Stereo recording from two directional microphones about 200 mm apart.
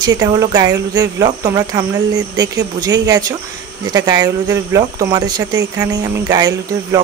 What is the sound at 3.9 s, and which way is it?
Speech, 20° right (ahead or behind).